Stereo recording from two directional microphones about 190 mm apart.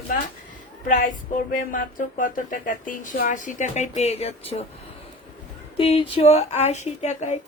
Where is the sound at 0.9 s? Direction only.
45° left (ahead or behind).